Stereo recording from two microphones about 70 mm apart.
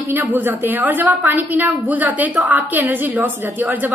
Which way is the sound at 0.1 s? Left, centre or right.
Right.